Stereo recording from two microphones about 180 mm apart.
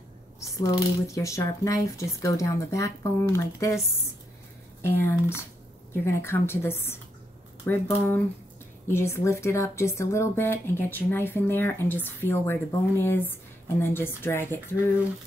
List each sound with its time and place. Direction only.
0.4 s speech: 20° left (ahead or behind)
4.8 s speech: 15° left (ahead or behind)